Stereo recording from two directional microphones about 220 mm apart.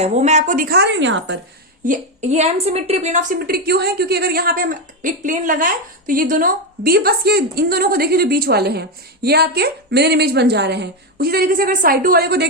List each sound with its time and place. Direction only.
0.0 s a woman's voice: 30° right (ahead or behind); by 1.4 s 55° right (ahead or behind)
1.8 s a woman's voice: 35° right (ahead or behind)